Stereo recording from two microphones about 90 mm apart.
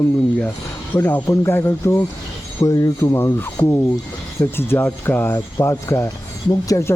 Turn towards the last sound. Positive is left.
turn(degrees=35)  # may be behind; listen again after turning